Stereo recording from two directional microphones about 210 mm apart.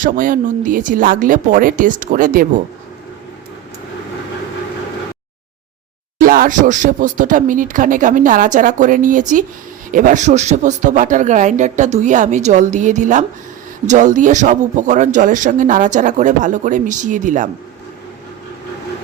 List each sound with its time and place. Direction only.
0.0 s speech: 40° right (ahead or behind)
6.1 s speech: 40° right (ahead or behind)